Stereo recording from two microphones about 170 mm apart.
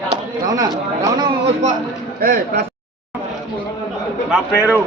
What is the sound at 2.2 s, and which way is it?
Speech, 55° right (ahead or behind).